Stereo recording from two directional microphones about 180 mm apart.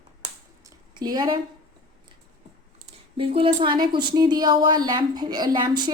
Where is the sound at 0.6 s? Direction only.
20° right (ahead or behind).